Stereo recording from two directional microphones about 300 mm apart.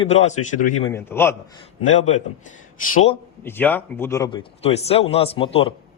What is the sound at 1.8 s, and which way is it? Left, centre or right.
Speech, left.